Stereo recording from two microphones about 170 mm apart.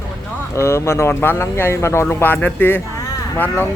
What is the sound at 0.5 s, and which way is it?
Speech, 15° left (ahead or behind).